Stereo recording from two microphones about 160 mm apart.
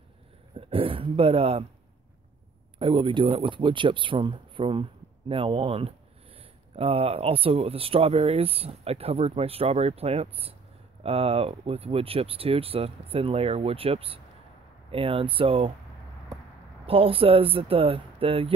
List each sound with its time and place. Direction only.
0.6 s speech: 35° right (ahead or behind)
2.8 s speech: 30° right (ahead or behind)
16.8 s speech: 35° right (ahead or behind)